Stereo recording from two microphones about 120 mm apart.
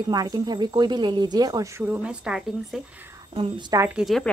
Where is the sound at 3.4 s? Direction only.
40° right (ahead or behind).